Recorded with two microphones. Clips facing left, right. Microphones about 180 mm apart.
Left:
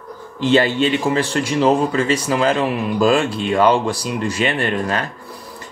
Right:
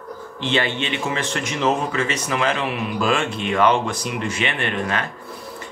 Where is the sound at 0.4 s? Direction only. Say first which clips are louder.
Left 8 dB; 40° left (ahead or behind).